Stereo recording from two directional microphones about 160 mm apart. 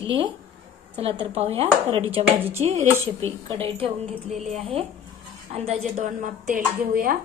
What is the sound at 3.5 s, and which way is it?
A woman's voice, 35° right (ahead or behind).